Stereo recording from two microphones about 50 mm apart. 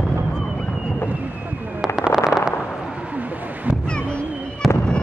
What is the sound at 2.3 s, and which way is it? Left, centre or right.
Fireworks, centre.